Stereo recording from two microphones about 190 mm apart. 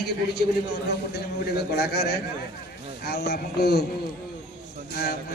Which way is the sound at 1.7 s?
60° left (ahead or behind).